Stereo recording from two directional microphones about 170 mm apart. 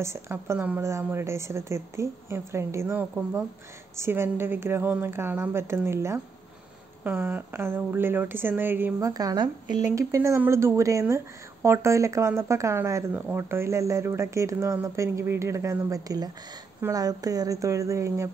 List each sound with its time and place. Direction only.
0.0 s speech: 15° right (ahead or behind)